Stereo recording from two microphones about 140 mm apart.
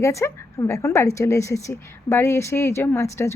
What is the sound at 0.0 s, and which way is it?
A woman's voice, 20° left (ahead or behind).